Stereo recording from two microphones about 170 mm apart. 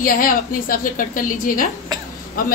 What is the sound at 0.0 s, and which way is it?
A woman's voice, 55° left (ahead or behind).